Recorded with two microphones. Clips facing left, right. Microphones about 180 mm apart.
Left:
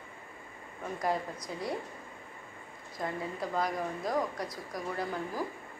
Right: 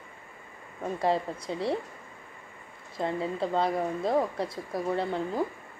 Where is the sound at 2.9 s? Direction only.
25° right (ahead or behind).